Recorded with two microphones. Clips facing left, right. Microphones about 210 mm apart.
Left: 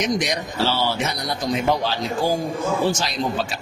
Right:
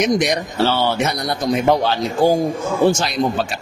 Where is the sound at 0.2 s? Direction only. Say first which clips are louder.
Right 5 dB; 60° right (ahead or behind).